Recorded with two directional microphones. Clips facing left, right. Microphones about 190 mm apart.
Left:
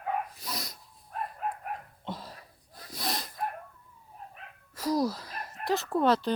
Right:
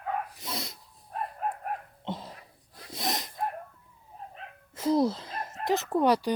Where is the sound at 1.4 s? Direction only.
45° right (ahead or behind).